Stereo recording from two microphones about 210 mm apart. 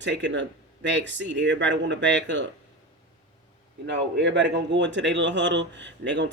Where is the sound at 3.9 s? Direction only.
60° right (ahead or behind).